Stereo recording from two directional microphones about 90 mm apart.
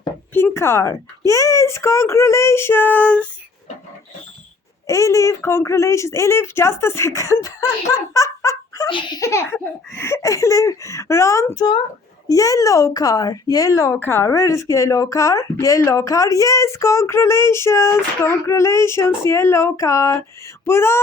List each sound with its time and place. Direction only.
0.3 s speech: 25° left (ahead or behind)
4.9 s speech: 35° left (ahead or behind)
8.1 s fowl: 35° left (ahead or behind)
8.9 s speech: 65° left (ahead or behind)
9.1 s speech: 35° left (ahead or behind)
13.9 s speech: 25° left (ahead or behind)